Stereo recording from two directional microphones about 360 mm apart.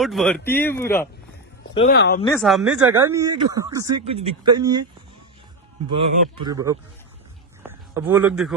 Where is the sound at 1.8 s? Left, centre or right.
Left.